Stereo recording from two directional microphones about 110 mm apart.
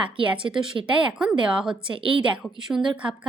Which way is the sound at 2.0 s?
50° right (ahead or behind).